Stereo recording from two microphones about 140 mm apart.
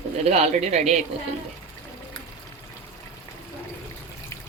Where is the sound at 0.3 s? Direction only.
50° right (ahead or behind).